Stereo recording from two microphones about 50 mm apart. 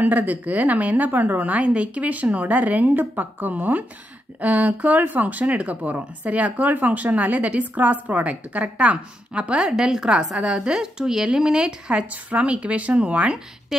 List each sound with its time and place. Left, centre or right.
0.0 s a woman's voice: right
9.6 s a woman's voice: centre
12.1 s speech: right